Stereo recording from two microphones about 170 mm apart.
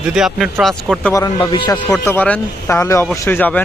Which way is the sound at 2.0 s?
10° left (ahead or behind).